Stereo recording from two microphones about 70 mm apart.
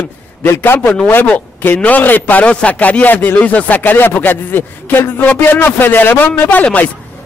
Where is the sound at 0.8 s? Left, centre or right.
Centre.